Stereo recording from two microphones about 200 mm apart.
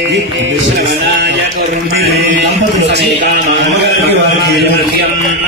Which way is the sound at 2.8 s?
60° right (ahead or behind).